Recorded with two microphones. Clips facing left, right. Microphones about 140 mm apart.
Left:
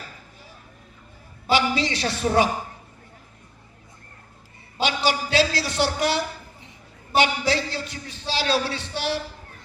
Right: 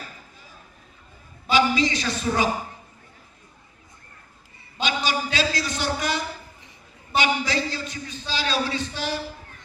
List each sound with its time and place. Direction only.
1.5 s a woman's voice: 65° left (ahead or behind)
4.8 s a sound: 70° left (ahead or behind)
8.3 s speech: 70° left (ahead or behind)